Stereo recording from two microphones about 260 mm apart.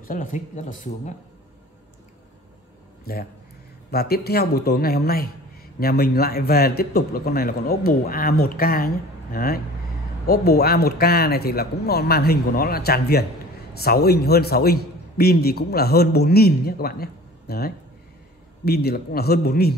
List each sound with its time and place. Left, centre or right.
0.0 s speech: left
3.1 s a man's voice: left